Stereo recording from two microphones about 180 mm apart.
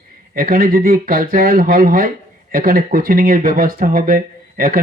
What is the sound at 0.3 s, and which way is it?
Speech, 55° right (ahead or behind).